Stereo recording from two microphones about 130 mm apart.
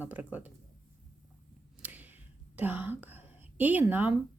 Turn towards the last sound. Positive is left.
turn(degrees=-15)  # may be behind; listen again after turning